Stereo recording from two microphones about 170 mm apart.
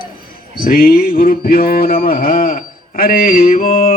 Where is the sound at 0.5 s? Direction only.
60° left (ahead or behind).